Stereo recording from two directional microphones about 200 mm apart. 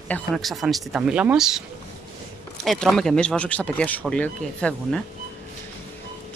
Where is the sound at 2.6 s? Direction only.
Centre (ahead or behind).